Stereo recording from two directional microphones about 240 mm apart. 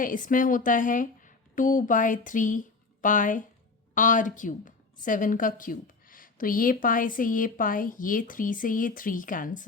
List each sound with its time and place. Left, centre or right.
0.0 s a woman's voice: left